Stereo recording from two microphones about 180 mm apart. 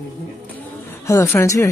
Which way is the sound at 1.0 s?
15° left (ahead or behind).